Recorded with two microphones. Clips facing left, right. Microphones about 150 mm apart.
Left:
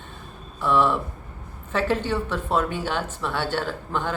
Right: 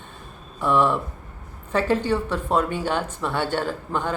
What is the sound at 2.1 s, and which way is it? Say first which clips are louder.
A man's voice: right 2 dB; 10° right (ahead or behind).